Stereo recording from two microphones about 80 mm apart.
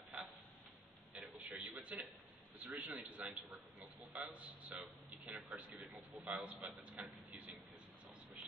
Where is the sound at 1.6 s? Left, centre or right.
Centre.